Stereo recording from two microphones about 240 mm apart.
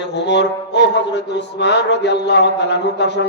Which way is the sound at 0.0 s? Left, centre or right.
Left.